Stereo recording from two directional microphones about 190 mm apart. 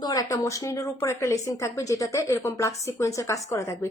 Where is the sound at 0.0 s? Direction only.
20° left (ahead or behind).